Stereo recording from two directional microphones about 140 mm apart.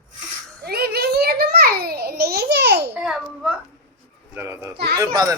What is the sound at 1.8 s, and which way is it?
Babbling, 90° right.